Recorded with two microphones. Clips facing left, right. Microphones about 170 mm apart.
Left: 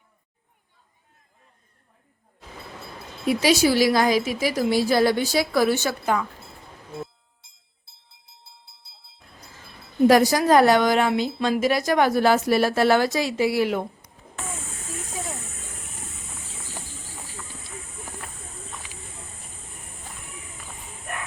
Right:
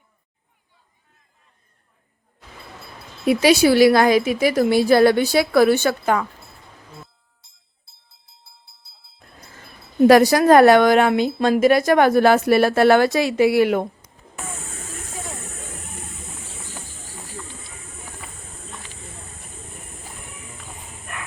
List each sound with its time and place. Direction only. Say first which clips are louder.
3.2 s speech: right 5 dB; 60° right (ahead or behind)
10.1 s speech: right 5 dB; 70° right (ahead or behind)
18.2 s a sound: even; centre (ahead or behind)